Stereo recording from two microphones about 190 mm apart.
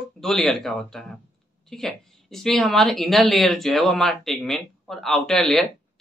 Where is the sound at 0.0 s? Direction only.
Centre (ahead or behind).